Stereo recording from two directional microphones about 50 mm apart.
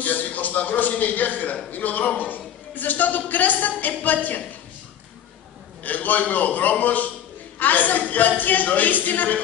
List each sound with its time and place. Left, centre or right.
0.0 s a man's voice: left
5.9 s a man's voice: left